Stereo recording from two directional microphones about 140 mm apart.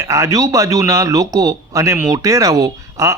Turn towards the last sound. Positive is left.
turn(degrees=-25)  # may be behind; listen again after turning